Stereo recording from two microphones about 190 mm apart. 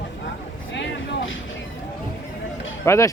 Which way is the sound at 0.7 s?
75° left (ahead or behind).